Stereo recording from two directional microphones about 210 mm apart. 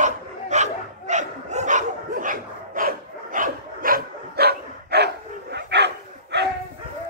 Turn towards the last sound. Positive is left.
turn(degrees=-55)  # may be behind; listen again after turning